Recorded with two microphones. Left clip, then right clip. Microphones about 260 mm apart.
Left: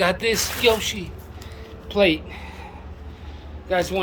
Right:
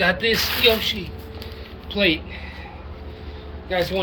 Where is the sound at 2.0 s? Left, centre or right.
Centre.